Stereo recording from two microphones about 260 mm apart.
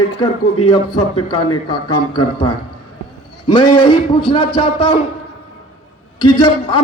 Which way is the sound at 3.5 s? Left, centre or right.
Left.